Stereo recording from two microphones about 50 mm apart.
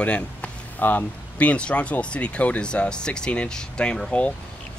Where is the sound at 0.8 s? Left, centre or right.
Left.